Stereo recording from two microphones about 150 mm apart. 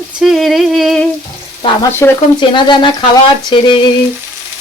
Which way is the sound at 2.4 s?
30° left (ahead or behind).